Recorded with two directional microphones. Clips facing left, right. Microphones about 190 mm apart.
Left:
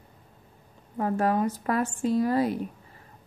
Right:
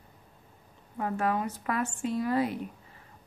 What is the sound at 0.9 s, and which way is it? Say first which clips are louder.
A woman's voice: left 4 dB; 40° left (ahead or behind).